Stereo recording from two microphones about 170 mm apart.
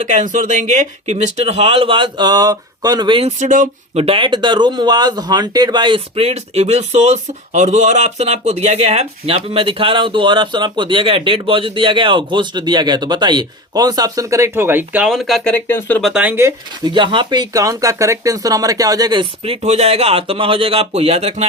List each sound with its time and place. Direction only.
0.1 s speech: 45° right (ahead or behind)
4.0 s speech: 30° right (ahead or behind); by 15.5 s centre (ahead or behind)
15.5 s speech: 10° left (ahead or behind)
16.0 s speech: 5° right (ahead or behind)
16.9 s speech: 30° right (ahead or behind)